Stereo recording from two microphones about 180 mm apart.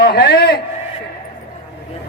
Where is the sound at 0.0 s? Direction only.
60° left (ahead or behind).